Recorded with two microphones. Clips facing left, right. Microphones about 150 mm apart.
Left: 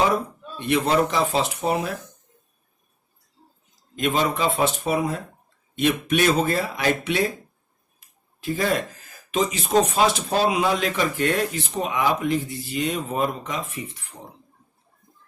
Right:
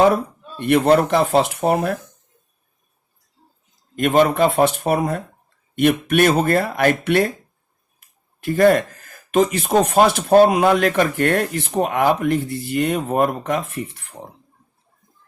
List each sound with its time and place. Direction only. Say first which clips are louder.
0.0 s speech: right 6 dB; 55° right (ahead or behind)
3.9 s speech: right 7 dB; 55° right (ahead or behind)
8.4 s speech: right 9 dB; 60° right (ahead or behind)